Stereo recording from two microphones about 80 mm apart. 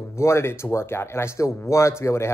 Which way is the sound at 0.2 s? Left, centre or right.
Left.